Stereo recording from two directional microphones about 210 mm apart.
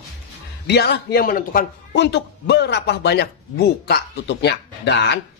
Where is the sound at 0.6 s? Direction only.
50° left (ahead or behind).